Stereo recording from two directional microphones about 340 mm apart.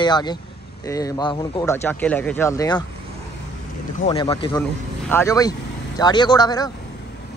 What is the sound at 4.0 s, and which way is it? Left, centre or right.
Speech, centre.